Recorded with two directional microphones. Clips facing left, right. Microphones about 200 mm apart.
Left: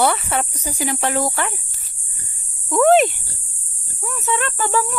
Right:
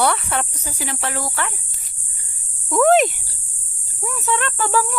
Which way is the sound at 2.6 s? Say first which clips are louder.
Left 1 dB; centre (ahead or behind).